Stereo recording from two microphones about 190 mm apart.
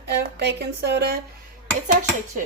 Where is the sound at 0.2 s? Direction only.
60° right (ahead or behind).